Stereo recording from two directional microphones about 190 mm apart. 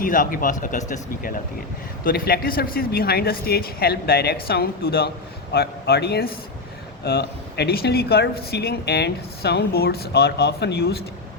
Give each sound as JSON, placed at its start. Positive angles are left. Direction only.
{"t": 0.0, "sound": "speech", "side_deg": 45}